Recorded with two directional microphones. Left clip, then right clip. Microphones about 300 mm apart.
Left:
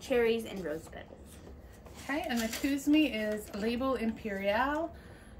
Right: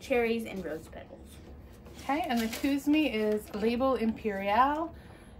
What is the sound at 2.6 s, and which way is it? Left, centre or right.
A woman's voice, centre.